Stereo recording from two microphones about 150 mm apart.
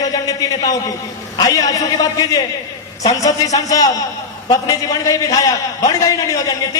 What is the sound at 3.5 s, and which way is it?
A man's voice, 25° left (ahead or behind).